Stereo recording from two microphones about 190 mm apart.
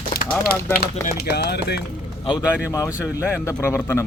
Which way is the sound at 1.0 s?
55° left (ahead or behind).